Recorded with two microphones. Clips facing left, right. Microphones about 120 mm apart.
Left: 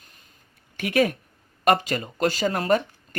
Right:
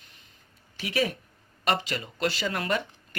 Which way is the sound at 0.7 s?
50° left (ahead or behind).